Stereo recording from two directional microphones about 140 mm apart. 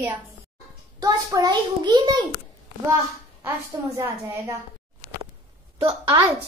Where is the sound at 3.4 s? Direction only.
20° right (ahead or behind).